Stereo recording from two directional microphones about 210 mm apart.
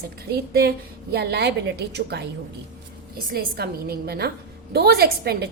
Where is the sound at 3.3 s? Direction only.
45° right (ahead or behind).